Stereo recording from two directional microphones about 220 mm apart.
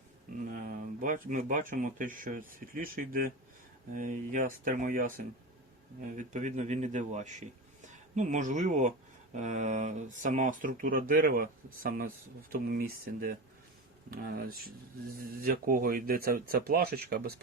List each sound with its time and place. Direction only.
0.3 s speech: 40° right (ahead or behind)